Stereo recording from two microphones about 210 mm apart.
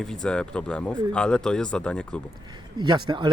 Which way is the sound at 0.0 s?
5° left (ahead or behind).